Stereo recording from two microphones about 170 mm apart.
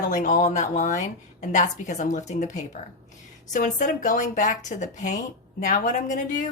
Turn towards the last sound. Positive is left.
turn(degrees=50)  # may be behind; listen again after turning